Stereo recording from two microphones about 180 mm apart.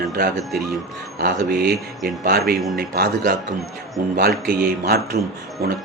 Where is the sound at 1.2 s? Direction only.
55° right (ahead or behind).